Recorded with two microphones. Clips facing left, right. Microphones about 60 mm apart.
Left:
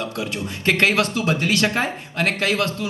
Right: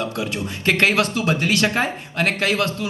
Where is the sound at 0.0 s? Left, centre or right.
Right.